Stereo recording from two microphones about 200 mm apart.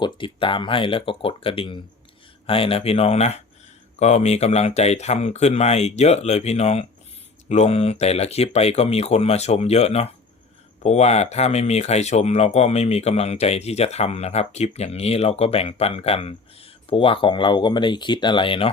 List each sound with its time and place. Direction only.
0.0 s speech: 25° left (ahead or behind)